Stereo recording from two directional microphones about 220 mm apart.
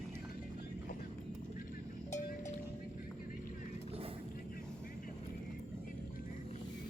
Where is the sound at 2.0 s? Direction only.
35° left (ahead or behind).